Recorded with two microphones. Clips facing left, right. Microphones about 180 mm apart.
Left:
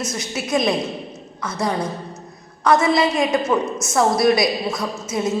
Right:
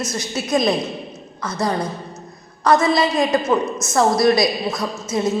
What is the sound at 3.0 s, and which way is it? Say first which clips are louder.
Speech: right 1 dB; centre (ahead or behind).